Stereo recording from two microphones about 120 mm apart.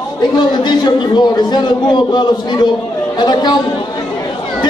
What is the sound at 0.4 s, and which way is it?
A man's voice, 40° left (ahead or behind).